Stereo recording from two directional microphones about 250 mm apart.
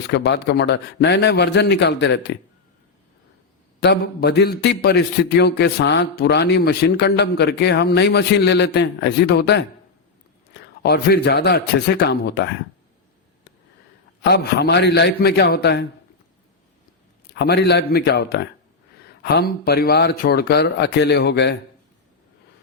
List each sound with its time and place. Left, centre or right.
0.1 s a man's voice: left
3.8 s a man's voice: left
10.8 s speech: left
14.2 s speech: left
17.3 s speech: left